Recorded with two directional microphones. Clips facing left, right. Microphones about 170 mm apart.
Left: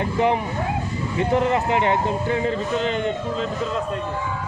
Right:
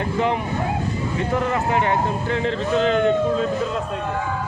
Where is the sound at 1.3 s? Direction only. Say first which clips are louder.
Left 2 dB; 20° left (ahead or behind).